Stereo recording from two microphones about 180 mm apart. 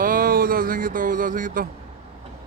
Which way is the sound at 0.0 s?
50° right (ahead or behind).